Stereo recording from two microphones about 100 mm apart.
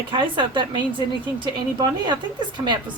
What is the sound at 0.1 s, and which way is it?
Speech, 50° right (ahead or behind).